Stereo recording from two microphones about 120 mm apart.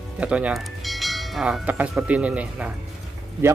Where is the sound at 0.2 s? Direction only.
10° right (ahead or behind).